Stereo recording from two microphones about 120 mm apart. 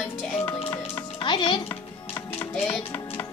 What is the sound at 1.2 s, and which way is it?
Speech, 40° left (ahead or behind).